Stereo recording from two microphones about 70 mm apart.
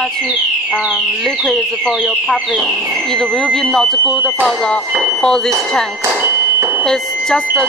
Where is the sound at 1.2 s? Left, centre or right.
Centre.